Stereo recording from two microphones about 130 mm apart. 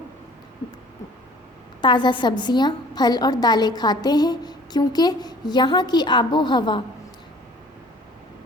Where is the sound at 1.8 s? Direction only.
35° left (ahead or behind).